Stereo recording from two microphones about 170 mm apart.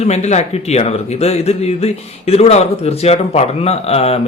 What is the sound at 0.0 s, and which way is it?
A man's voice, 40° left (ahead or behind).